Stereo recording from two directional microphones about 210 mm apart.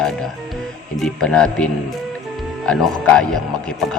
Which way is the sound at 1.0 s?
5° left (ahead or behind).